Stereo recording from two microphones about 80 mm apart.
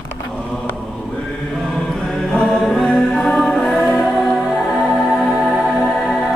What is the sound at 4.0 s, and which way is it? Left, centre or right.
Music, centre.